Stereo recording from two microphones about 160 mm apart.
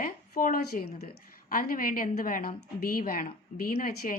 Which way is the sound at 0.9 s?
70° left (ahead or behind).